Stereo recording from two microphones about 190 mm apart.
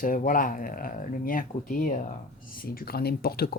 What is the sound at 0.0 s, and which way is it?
Speech, 45° left (ahead or behind).